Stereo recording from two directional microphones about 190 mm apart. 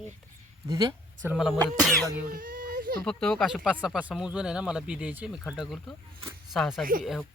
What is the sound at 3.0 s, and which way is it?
Speech, centre (ahead or behind).